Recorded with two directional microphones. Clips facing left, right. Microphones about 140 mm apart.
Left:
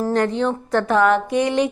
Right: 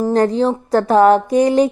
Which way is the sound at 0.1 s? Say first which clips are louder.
Right 6 dB; 35° right (ahead or behind).